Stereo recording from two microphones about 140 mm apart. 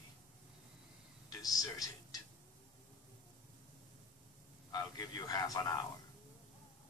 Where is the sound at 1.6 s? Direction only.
25° left (ahead or behind).